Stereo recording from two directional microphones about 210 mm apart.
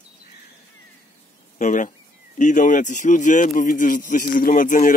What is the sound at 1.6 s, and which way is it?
Speech, 35° left (ahead or behind).